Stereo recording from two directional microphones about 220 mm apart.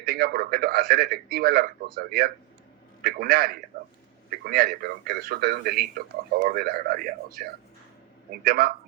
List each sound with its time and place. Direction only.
0.0 s a man's voice: 45° right (ahead or behind)
8.4 s a man's voice: 40° right (ahead or behind)